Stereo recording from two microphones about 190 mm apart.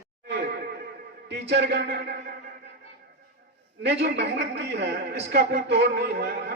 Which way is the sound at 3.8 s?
65° right (ahead or behind).